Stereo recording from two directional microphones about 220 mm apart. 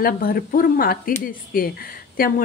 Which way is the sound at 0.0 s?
40° left (ahead or behind).